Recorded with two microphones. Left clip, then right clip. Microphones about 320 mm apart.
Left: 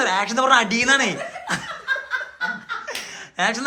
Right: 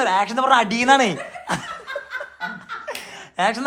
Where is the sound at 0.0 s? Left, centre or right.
Centre.